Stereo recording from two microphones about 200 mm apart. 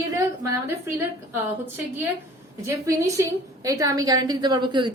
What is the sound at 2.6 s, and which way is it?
A woman's voice, 15° right (ahead or behind).